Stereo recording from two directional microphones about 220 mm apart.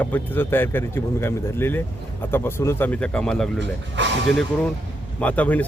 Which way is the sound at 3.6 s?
55° right (ahead or behind).